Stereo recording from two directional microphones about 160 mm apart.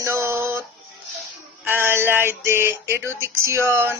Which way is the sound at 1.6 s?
15° right (ahead or behind).